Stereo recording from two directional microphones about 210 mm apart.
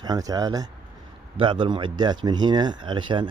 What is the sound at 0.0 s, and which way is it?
Speech, 20° right (ahead or behind).